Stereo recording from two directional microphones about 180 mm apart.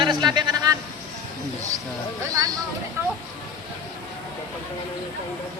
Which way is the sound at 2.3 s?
20° right (ahead or behind).